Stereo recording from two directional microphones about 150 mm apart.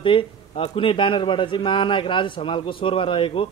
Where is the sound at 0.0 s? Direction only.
35° left (ahead or behind).